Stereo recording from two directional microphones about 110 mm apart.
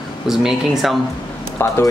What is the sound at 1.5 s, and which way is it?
Speech, 25° left (ahead or behind).